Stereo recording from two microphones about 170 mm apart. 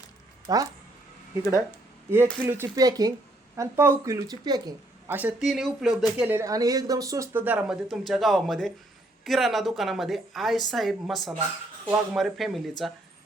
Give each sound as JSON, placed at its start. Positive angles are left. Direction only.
{"t": 0.4, "sound": "speech", "side_deg": -20}
{"t": 2.0, "sound": "speech", "side_deg": -15}
{"t": 5.0, "sound": "a woman's voice", "side_deg": -10}